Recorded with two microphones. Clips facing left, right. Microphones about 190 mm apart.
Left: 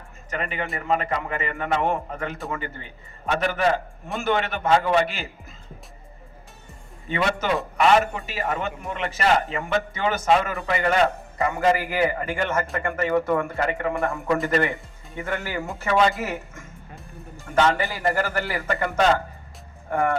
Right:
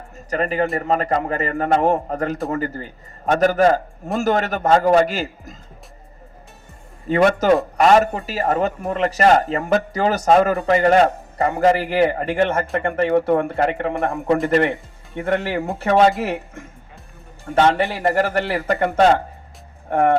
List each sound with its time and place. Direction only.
0.3 s a man's voice: 35° right (ahead or behind)
7.1 s a man's voice: 45° right (ahead or behind)